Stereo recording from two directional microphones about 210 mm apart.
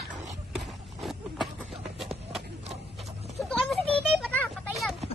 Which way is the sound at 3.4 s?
Centre (ahead or behind).